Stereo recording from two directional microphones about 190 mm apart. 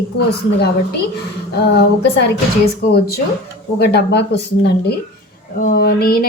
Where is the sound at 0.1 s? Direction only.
60° left (ahead or behind).